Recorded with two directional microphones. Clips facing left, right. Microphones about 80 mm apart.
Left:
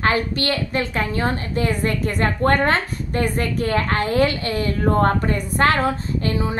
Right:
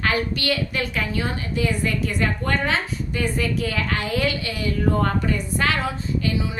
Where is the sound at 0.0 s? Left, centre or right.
Left.